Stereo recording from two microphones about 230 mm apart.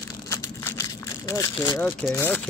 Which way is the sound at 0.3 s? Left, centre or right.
Centre.